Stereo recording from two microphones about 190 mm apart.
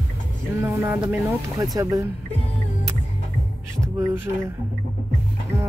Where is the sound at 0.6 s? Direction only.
10° right (ahead or behind).